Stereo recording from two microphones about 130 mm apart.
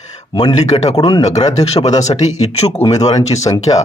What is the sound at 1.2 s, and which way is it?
Speech, 60° left (ahead or behind).